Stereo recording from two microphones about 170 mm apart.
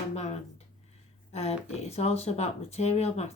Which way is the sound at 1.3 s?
40° left (ahead or behind).